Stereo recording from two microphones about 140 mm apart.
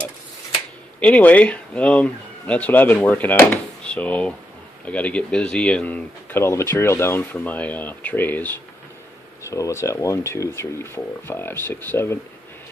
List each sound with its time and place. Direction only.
0.9 s speech: 10° left (ahead or behind)